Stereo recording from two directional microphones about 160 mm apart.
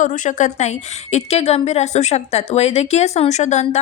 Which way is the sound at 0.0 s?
50° left (ahead or behind).